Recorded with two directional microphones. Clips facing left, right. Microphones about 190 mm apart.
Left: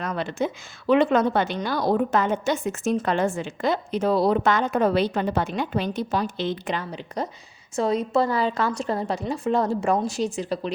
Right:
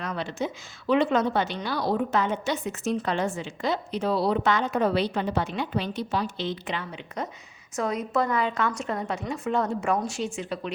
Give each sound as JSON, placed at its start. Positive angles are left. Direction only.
{"t": 0.0, "sound": "a woman's voice", "side_deg": 50}